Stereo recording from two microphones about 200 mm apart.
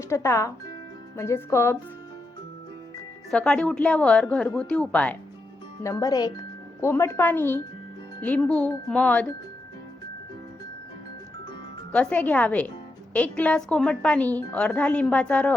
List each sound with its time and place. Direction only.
0.1 s speech: 15° left (ahead or behind)
3.3 s a woman's voice: 5° left (ahead or behind)
11.9 s speech: 5° left (ahead or behind)